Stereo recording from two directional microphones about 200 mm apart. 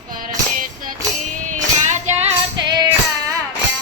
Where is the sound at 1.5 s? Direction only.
35° right (ahead or behind).